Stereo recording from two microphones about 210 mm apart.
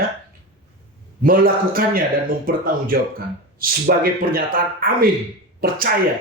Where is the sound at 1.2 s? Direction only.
45° right (ahead or behind).